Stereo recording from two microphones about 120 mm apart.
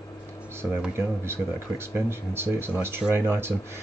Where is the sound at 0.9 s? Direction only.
20° right (ahead or behind).